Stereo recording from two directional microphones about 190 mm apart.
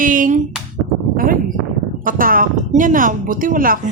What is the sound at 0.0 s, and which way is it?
A woman's voice, 45° right (ahead or behind).